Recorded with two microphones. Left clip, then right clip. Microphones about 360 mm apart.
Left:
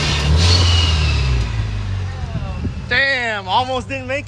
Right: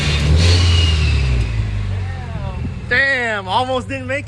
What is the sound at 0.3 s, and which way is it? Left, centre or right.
Music, centre.